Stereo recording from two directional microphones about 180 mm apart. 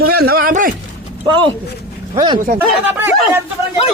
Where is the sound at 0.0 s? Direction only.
60° right (ahead or behind).